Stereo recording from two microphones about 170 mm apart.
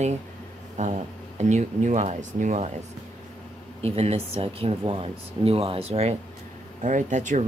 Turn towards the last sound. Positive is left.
turn(degrees=-45)  # may be behind; listen again after turning